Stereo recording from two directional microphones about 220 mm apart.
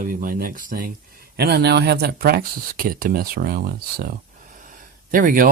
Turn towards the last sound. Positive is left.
turn(degrees=-40)  # may be behind; listen again after turning